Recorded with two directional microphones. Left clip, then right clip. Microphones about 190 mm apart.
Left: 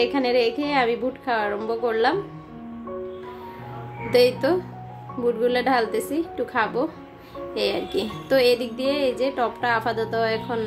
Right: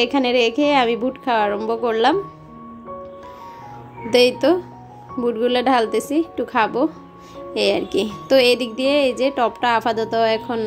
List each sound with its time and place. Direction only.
0.0 s speech: 35° right (ahead or behind)
4.1 s speech: 35° right (ahead or behind)